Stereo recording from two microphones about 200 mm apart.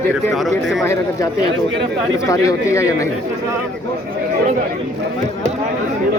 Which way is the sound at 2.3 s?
15° left (ahead or behind).